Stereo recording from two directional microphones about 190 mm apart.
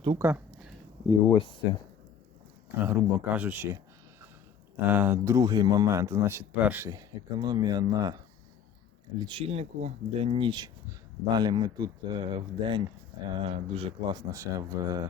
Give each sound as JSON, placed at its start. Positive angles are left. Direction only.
{"t": 0.2, "sound": "a sound", "side_deg": -10}
{"t": 1.0, "sound": "speech", "side_deg": 20}
{"t": 2.8, "sound": "speech", "side_deg": -10}
{"t": 4.9, "sound": "speech", "side_deg": -10}